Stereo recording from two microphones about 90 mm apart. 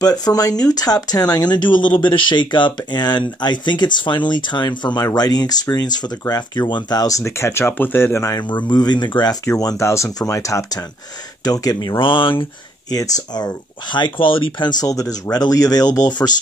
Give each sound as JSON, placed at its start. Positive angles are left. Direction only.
{"t": 0.0, "sound": "speech", "side_deg": 45}
{"t": 8.5, "sound": "speech", "side_deg": 55}
{"t": 9.6, "sound": "speech", "side_deg": 40}
{"t": 12.0, "sound": "speech", "side_deg": 70}
{"t": 12.9, "sound": "speech", "side_deg": 45}
{"t": 14.7, "sound": "speech", "side_deg": 45}